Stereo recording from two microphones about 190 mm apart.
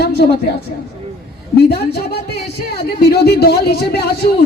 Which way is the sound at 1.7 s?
55° left (ahead or behind).